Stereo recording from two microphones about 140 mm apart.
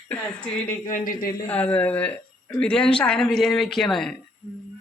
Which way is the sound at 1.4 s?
10° left (ahead or behind).